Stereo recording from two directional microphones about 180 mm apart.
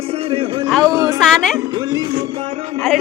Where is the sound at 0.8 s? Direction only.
20° right (ahead or behind).